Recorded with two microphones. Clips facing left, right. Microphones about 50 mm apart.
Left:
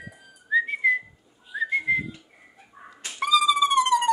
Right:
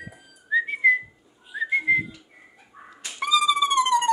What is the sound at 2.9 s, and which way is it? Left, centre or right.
Music, centre.